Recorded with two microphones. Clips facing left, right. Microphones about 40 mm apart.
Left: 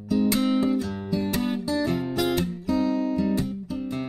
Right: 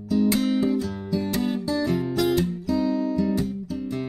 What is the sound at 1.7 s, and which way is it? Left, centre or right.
Music, left.